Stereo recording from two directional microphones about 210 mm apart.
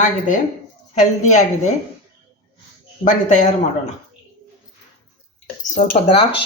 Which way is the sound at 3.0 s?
35° left (ahead or behind).